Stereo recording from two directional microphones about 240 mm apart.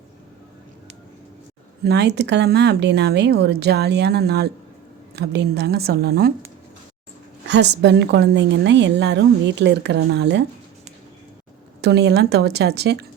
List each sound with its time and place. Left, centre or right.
1.8 s a woman's voice: right
7.4 s a woman's voice: right
11.8 s a woman's voice: right